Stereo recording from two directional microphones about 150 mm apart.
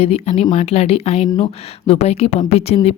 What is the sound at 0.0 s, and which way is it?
A woman's voice, 45° left (ahead or behind).